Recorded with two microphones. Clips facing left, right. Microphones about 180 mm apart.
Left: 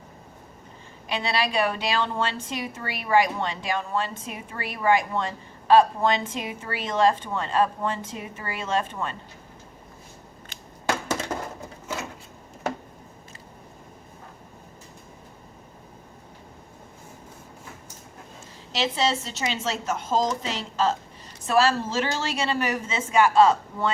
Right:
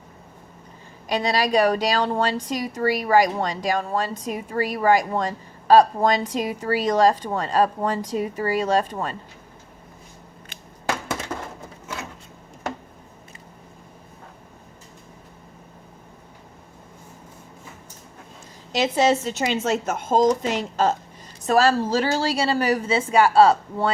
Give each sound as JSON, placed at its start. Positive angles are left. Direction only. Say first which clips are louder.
{"t": 1.0, "sound": "a woman's voice", "louder": "right 4 dB", "side_deg": -40}
{"t": 11.3, "sound": "a sound", "louder": "left 1 dB", "side_deg": 30}
{"t": 18.8, "sound": "a woman's voice", "louder": "right 6 dB", "side_deg": -50}